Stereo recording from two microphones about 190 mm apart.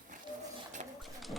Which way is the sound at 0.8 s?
40° right (ahead or behind).